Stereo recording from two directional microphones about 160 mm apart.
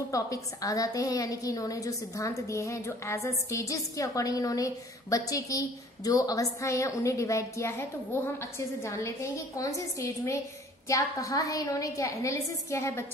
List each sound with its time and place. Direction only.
0.1 s a woman's voice: 20° left (ahead or behind)